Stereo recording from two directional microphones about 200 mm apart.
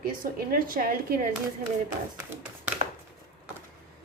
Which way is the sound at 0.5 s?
45° right (ahead or behind).